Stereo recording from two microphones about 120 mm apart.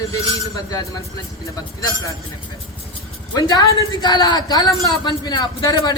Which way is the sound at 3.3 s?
30° left (ahead or behind).